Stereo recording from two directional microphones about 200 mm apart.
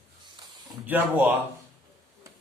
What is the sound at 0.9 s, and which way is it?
Speech, 10° right (ahead or behind).